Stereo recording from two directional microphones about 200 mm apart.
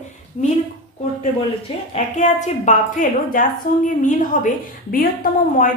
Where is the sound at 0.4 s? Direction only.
35° left (ahead or behind).